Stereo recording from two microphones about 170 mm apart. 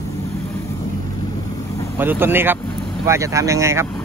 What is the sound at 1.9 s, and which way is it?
Speech, 10° right (ahead or behind).